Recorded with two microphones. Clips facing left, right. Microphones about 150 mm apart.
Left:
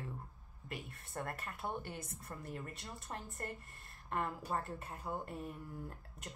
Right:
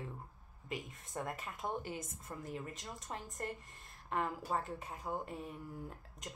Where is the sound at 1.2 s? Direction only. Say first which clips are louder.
Right 1 dB; 15° right (ahead or behind).